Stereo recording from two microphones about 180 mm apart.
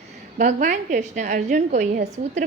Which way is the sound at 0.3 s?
45° right (ahead or behind).